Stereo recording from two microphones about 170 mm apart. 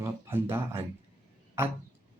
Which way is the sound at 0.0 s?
15° right (ahead or behind).